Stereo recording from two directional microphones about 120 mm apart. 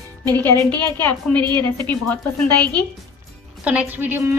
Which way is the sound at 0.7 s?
35° right (ahead or behind).